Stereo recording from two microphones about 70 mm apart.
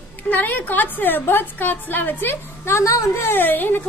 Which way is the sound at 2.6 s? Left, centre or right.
Left.